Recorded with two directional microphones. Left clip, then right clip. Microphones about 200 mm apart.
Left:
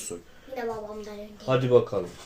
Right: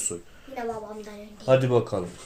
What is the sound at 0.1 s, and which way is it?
Speech, 30° right (ahead or behind).